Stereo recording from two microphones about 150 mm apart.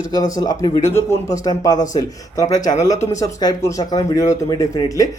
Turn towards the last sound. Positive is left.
turn(degrees=25)  # may be behind; listen again after turning